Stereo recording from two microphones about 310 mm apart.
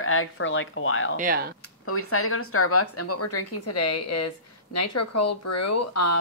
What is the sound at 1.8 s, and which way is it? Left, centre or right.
Speech, left.